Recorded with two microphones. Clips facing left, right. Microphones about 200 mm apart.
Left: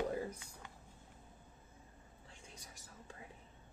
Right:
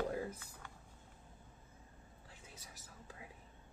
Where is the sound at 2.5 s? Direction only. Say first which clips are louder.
Left 1 dB; 5° right (ahead or behind).